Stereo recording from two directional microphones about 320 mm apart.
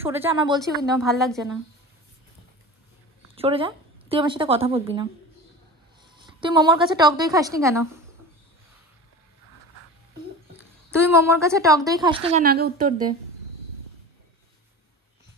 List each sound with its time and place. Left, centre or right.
0.0 s a woman's voice: centre
1.0 s a woman's voice: centre
3.3 s speech: centre
6.1 s a woman's voice: centre
10.9 s a woman's voice: centre; by 13.1 s right